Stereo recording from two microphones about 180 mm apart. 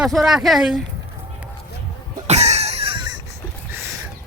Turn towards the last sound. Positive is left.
turn(degrees=-25)  # may be behind; listen again after turning